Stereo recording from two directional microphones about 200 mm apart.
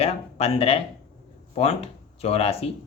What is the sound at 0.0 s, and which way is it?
Speech, 30° left (ahead or behind).